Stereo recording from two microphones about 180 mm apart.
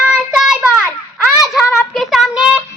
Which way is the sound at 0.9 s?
10° right (ahead or behind).